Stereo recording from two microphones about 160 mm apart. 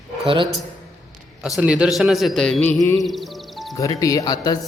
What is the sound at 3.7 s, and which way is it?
Speech, 20° left (ahead or behind).